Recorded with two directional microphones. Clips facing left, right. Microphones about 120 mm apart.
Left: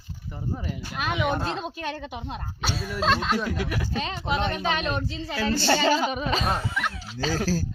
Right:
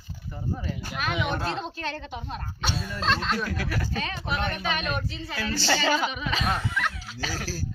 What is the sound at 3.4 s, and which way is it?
Speech, 20° left (ahead or behind).